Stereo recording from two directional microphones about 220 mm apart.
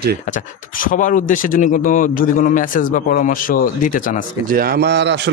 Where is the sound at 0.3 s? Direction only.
35° left (ahead or behind).